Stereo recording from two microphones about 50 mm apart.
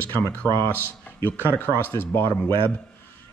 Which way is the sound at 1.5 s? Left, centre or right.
Left.